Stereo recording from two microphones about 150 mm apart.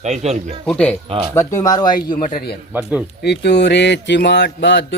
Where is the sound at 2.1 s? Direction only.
65° left (ahead or behind).